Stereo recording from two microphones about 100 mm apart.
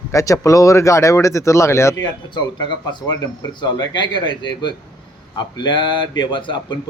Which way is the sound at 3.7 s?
45° left (ahead or behind).